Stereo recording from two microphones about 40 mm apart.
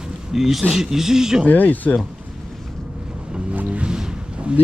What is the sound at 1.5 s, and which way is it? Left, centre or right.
Speech, left.